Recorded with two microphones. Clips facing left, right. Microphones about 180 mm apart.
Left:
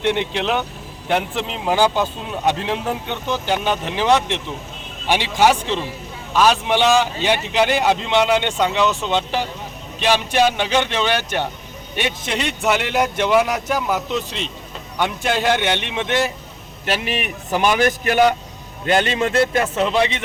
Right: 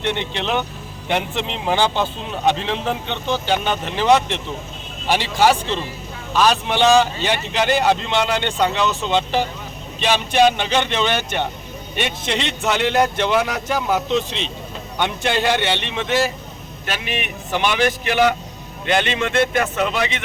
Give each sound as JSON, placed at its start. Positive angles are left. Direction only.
{"t": 0.0, "sound": "a man's voice", "side_deg": 10}
{"t": 5.1, "sound": "speech", "side_deg": 15}
{"t": 10.0, "sound": "a man's voice", "side_deg": 10}
{"t": 16.8, "sound": "a man's voice", "side_deg": 35}